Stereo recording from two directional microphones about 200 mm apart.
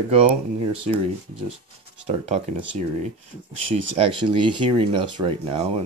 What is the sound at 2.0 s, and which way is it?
Speech, 35° right (ahead or behind).